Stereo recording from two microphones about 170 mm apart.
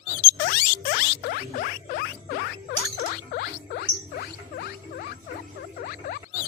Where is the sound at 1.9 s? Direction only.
75° left (ahead or behind).